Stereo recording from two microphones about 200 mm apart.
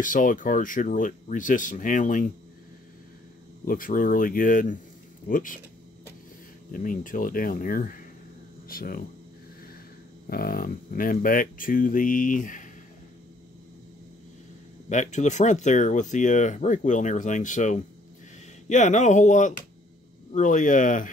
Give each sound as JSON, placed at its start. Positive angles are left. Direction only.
{"t": 0.0, "sound": "speech", "side_deg": 40}
{"t": 3.6, "sound": "speech", "side_deg": 45}
{"t": 6.7, "sound": "speech", "side_deg": 40}
{"t": 10.2, "sound": "speech", "side_deg": 50}
{"t": 14.9, "sound": "speech", "side_deg": 35}